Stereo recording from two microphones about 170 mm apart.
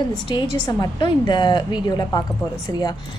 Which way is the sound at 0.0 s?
25° left (ahead or behind).